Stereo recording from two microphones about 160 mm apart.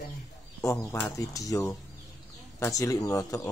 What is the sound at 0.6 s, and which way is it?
Speech, 20° left (ahead or behind).